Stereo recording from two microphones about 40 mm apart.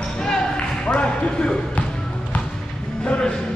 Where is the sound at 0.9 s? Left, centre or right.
Left.